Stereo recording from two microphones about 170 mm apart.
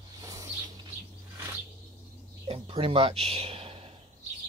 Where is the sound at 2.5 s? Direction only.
30° right (ahead or behind).